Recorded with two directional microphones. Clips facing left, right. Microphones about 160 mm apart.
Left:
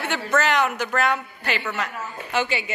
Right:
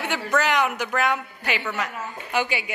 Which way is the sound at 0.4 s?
10° right (ahead or behind).